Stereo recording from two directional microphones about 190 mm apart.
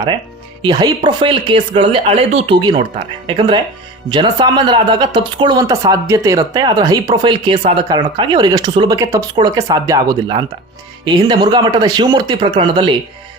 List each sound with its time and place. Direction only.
0.6 s speech: 20° right (ahead or behind)